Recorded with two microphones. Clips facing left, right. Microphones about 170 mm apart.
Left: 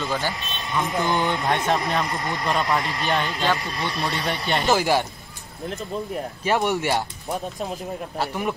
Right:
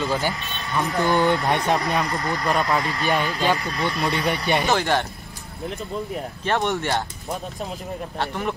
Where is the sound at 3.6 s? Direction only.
25° left (ahead or behind).